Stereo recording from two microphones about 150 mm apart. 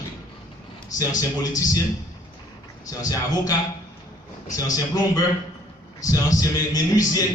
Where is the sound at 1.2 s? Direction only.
25° left (ahead or behind).